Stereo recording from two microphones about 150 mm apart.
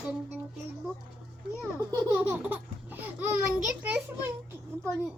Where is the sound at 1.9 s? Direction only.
20° right (ahead or behind).